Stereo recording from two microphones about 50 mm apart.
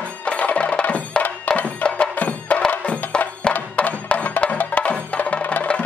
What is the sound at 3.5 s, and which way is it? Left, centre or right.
Music, left.